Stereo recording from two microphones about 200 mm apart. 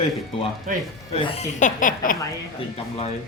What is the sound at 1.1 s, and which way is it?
Speech, 30° left (ahead or behind).